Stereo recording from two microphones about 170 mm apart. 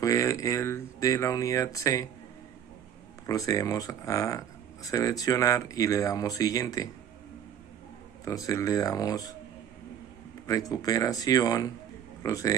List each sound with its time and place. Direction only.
0.0 s speech: 20° left (ahead or behind)
3.3 s speech: 20° left (ahead or behind)
8.3 s speech: 20° left (ahead or behind)
10.4 s speech: 20° left (ahead or behind)